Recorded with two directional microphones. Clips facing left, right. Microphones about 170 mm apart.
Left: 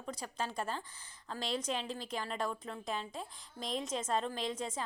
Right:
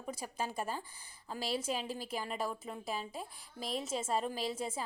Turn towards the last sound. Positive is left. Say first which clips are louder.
# right 1 dB
turn(degrees=-10)  # may be behind; listen again after turning